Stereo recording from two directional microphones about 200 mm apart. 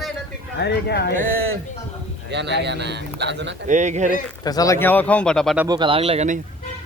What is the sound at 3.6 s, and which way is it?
Speech, 35° right (ahead or behind).